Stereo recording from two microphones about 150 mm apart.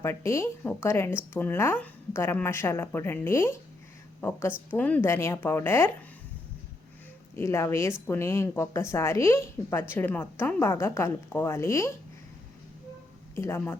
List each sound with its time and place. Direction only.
0.0 s speech: 20° left (ahead or behind)
7.3 s speech: 20° left (ahead or behind)
13.3 s speech: 15° left (ahead or behind)